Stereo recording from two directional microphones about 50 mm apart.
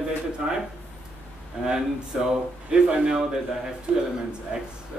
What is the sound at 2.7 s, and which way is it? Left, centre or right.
Speech, right.